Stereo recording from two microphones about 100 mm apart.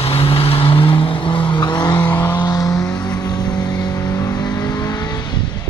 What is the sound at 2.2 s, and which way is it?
Vehicle, 35° left (ahead or behind).